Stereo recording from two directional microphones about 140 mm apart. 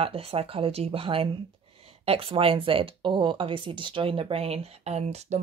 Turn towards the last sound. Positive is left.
turn(degrees=-50)  # may be behind; listen again after turning